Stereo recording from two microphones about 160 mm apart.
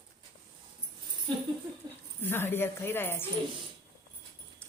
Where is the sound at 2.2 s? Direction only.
15° left (ahead or behind).